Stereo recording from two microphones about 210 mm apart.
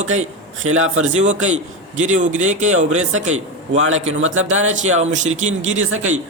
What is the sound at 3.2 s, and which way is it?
Speech, 75° right (ahead or behind).